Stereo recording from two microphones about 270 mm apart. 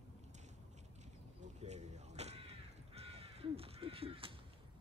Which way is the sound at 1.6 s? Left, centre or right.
Right.